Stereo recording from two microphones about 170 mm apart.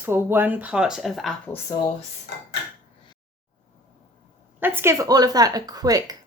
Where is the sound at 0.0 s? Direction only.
15° right (ahead or behind).